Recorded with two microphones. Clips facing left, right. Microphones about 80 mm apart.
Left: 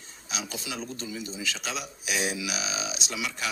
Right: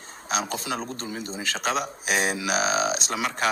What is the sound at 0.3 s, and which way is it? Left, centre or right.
A man's voice, right.